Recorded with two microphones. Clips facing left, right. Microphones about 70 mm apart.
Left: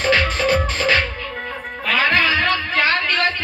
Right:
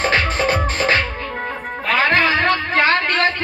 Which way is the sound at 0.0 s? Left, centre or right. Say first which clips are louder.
Even; right.